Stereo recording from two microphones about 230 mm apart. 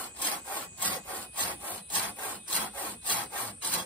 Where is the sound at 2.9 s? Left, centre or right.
Centre.